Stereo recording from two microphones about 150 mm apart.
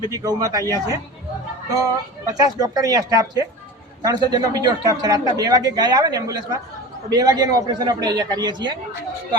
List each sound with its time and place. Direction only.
0.1 s a man's voice: 25° right (ahead or behind)
1.7 s a man's voice: 20° right (ahead or behind)